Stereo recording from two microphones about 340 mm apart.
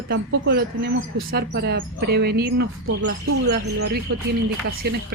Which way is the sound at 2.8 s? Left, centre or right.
Right.